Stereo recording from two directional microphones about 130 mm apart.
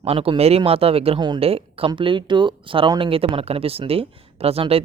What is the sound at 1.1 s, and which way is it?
Speech, 35° right (ahead or behind).